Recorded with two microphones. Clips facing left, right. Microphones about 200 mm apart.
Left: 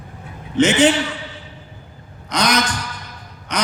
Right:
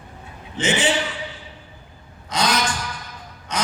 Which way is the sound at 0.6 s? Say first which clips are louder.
Left 8 dB; 65° left (ahead or behind).